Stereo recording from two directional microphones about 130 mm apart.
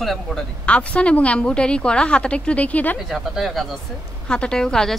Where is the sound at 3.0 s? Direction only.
Centre (ahead or behind).